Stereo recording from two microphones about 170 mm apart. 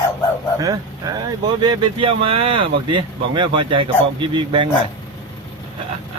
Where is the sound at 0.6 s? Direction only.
20° right (ahead or behind).